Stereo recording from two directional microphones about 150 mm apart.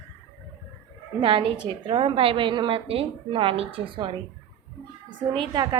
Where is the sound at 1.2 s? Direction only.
35° right (ahead or behind).